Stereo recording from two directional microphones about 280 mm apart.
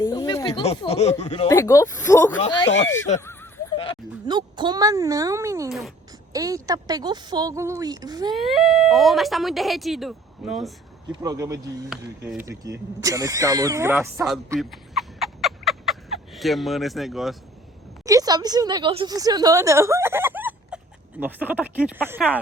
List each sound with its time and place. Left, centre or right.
0.0 s speech: centre
1.5 s speech: centre
2.6 s speech: left
3.2 s a sound: centre
4.3 s a woman's voice: centre
8.4 s speech: centre
11.1 s a woman's voice: centre
14.6 s a sound: centre
18.0 s a woman's voice: centre